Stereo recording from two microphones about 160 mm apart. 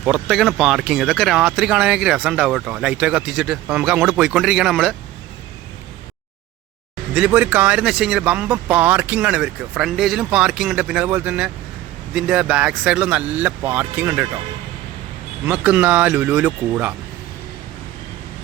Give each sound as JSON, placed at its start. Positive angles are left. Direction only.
{"t": 0.0, "sound": "speech", "side_deg": -5}
{"t": 7.1, "sound": "speech", "side_deg": -10}
{"t": 15.4, "sound": "speech", "side_deg": -10}